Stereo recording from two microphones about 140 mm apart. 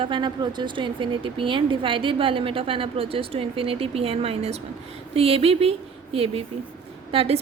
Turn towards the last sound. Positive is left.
turn(degrees=-45)  # may be behind; listen again after turning